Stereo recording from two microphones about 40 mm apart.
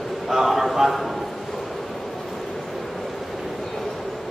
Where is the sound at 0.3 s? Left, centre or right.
Centre.